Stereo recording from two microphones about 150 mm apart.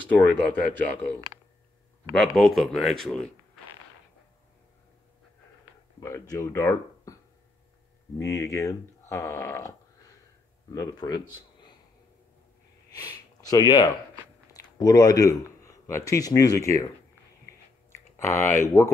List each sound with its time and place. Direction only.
0.1 s speech: 10° left (ahead or behind)
2.1 s speech: centre (ahead or behind)
5.9 s speech: 20° left (ahead or behind)
8.2 s speech: 20° left (ahead or behind)
12.9 s a man's voice: 25° left (ahead or behind)
17.9 s speech: 15° left (ahead or behind)